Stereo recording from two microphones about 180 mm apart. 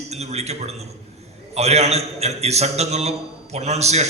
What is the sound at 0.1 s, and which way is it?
A man's voice, 35° right (ahead or behind).